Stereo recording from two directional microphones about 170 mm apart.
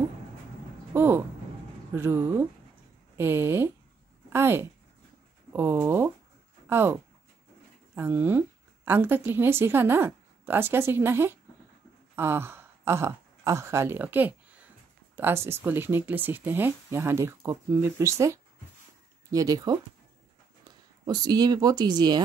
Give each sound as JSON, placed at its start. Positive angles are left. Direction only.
{"t": 0.9, "sound": "a woman's voice", "side_deg": -15}
{"t": 21.0, "sound": "speech", "side_deg": -25}